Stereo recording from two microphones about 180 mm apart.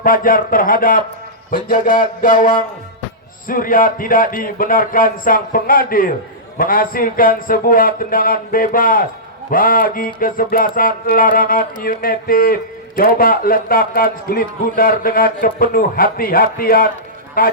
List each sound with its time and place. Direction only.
0.0 s a man's voice: 50° left (ahead or behind)